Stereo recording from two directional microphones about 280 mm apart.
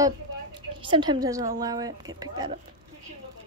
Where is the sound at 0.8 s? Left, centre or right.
Centre.